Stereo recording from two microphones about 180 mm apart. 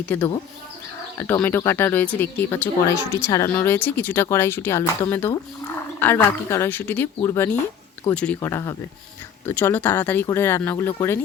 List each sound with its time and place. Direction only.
0.0 s speech: 10° left (ahead or behind)
8.4 s speech: 15° left (ahead or behind)